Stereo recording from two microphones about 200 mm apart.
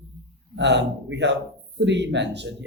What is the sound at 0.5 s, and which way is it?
Speech, 60° right (ahead or behind).